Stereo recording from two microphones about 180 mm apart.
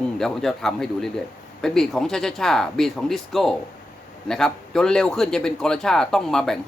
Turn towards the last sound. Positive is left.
turn(degrees=0)  # may be behind; listen again after turning